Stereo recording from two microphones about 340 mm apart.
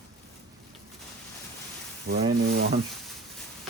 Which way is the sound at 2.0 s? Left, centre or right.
Right.